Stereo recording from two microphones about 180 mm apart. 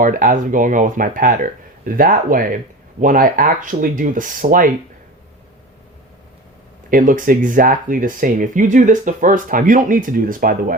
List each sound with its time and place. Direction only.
0.0 s speech: 50° right (ahead or behind)
6.9 s speech: 50° right (ahead or behind)